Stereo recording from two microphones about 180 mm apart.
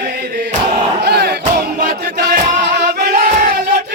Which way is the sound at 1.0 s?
65° right (ahead or behind).